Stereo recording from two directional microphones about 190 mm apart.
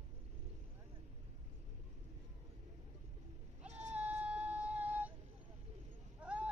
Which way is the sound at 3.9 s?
5° right (ahead or behind).